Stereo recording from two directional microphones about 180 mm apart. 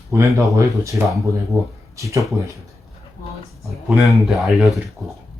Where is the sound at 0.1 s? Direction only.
15° right (ahead or behind).